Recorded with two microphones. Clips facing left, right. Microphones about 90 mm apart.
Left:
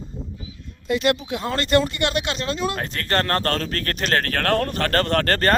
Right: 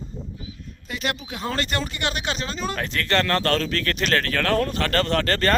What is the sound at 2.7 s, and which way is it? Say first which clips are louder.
Speech: even; 35° left (ahead or behind).